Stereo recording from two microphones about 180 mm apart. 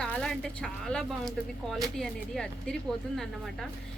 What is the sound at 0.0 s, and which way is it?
Speech, 5° left (ahead or behind).